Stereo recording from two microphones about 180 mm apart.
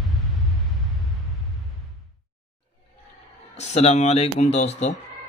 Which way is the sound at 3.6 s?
40° left (ahead or behind).